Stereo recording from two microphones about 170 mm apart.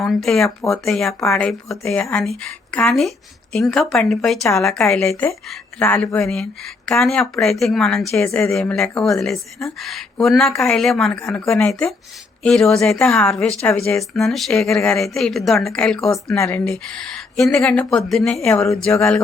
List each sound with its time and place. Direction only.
0.0 s speech: centre (ahead or behind)
5.0 s speech: 15° left (ahead or behind)
16.3 s speech: 10° left (ahead or behind)
18.4 s speech: 10° left (ahead or behind)